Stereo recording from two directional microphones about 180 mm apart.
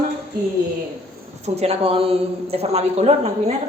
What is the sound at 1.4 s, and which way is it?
A man's voice, 35° right (ahead or behind).